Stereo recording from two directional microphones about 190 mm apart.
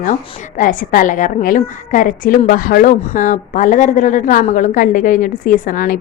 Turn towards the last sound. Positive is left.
turn(degrees=45)  # may be behind; listen again after turning